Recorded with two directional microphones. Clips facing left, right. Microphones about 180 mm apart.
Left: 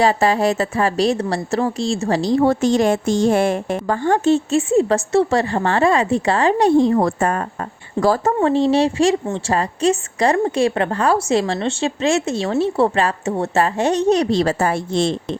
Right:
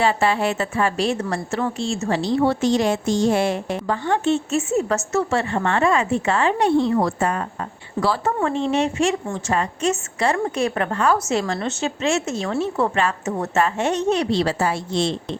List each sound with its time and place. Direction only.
0.0 s a woman's voice: 40° left (ahead or behind)
8.4 s a woman's voice: 35° left (ahead or behind); by 15.1 s 50° left (ahead or behind)